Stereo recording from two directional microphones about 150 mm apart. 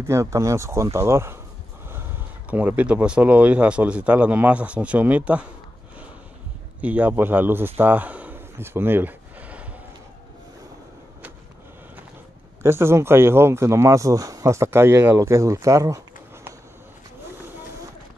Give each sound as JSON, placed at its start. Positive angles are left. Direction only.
{"t": 0.0, "sound": "speech", "side_deg": -20}
{"t": 2.5, "sound": "speech", "side_deg": -10}
{"t": 6.8, "sound": "a man's voice", "side_deg": -10}
{"t": 12.6, "sound": "speech", "side_deg": -15}